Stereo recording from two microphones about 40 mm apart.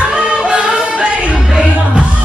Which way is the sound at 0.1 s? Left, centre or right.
Right.